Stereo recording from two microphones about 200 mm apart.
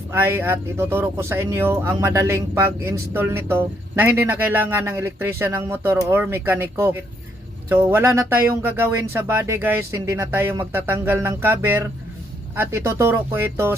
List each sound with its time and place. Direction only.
0.1 s speech: 10° right (ahead or behind)